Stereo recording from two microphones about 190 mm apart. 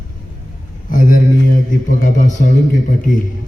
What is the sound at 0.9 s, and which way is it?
A man's voice, 45° left (ahead or behind).